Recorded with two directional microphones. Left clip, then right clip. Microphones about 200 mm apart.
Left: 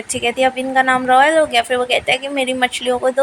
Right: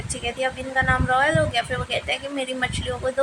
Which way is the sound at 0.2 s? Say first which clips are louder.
Left 10 dB; 30° left (ahead or behind).